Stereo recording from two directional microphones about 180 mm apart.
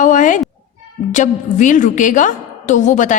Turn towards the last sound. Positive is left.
turn(degrees=45)  # may be behind; listen again after turning